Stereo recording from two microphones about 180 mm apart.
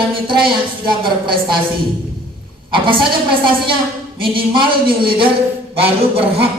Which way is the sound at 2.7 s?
30° right (ahead or behind).